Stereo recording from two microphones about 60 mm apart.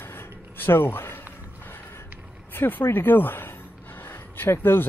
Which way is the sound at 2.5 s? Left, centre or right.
Left.